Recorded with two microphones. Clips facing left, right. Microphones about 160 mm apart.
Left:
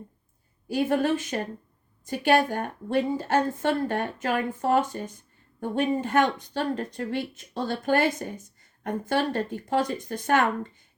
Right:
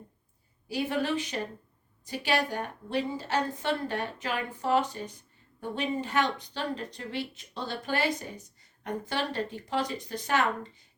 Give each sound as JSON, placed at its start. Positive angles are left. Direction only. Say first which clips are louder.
{"t": 0.7, "sound": "a woman's voice", "louder": "left 5 dB", "side_deg": 50}